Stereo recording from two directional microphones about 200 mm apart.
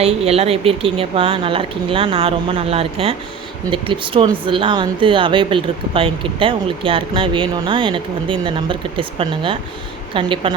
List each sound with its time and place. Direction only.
0.0 s speech: 30° right (ahead or behind)